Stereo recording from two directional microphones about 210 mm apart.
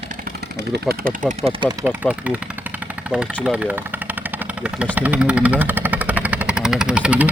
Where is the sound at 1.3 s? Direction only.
25° right (ahead or behind).